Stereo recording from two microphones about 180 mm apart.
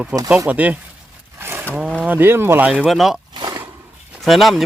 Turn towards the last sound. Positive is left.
turn(degrees=0)  # may be behind; listen again after turning